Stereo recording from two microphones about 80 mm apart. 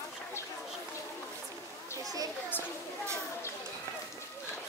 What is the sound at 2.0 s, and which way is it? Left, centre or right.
Children playing, right.